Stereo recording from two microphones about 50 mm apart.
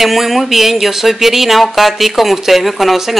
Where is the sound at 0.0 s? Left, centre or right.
Centre.